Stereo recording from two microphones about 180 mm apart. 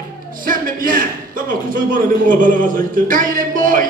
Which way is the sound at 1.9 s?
50° right (ahead or behind).